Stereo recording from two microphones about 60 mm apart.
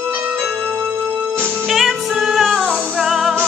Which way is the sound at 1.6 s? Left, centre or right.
Centre.